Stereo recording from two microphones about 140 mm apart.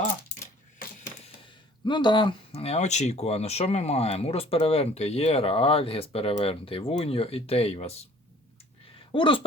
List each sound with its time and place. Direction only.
1.8 s speech: 35° left (ahead or behind); by 7.9 s 50° left (ahead or behind)
9.1 s speech: 35° left (ahead or behind)